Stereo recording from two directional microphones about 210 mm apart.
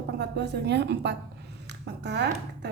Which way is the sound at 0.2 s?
55° right (ahead or behind).